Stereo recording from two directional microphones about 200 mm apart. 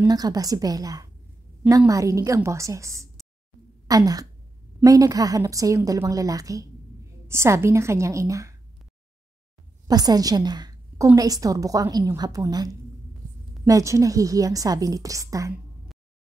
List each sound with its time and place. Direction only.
0.1 s a woman's voice: 20° right (ahead or behind)
9.8 s a woman's voice: 20° right (ahead or behind)